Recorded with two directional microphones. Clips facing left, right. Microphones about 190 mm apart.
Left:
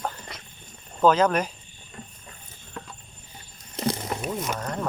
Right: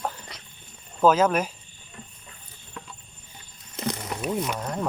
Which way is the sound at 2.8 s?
45° left (ahead or behind).